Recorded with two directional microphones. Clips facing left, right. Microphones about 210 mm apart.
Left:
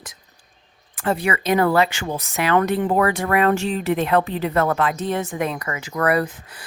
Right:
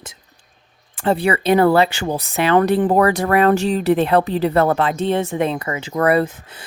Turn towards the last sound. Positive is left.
turn(degrees=-25)  # may be behind; listen again after turning